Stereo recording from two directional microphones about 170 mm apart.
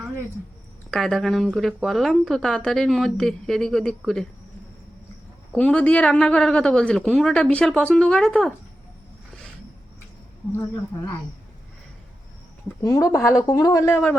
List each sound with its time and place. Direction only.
0.9 s speech: centre (ahead or behind)
5.5 s speech: 5° left (ahead or behind)
10.5 s speech: 15° left (ahead or behind)
12.8 s a woman's voice: 20° left (ahead or behind)